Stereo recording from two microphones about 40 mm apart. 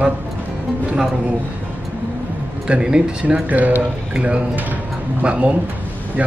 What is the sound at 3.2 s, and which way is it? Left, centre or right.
Speech, right.